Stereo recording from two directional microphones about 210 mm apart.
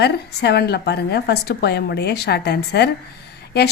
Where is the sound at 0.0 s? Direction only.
50° left (ahead or behind).